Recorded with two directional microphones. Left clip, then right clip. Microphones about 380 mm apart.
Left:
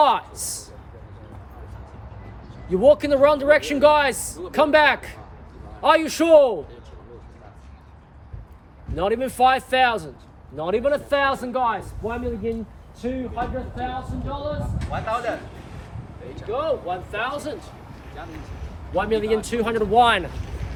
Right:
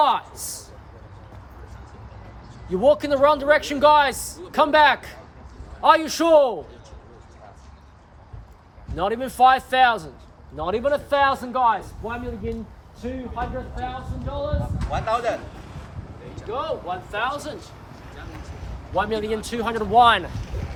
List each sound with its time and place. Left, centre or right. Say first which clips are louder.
0.0 s a sound: left 2 dB; centre
2.6 s a man's voice: left 2 dB; centre
9.0 s a man's voice: right 1 dB; centre
14.8 s speech: right 2 dB; right
16.5 s a man's voice: left 3 dB; centre
18.9 s speech: left 2 dB; centre